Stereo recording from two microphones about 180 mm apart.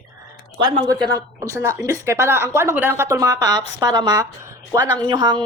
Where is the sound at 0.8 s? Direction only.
20° right (ahead or behind).